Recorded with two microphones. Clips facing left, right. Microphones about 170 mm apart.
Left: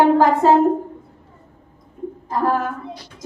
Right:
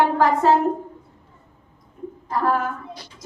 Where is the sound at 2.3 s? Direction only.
30° left (ahead or behind).